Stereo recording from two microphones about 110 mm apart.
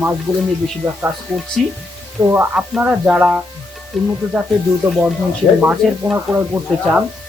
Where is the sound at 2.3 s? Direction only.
15° right (ahead or behind).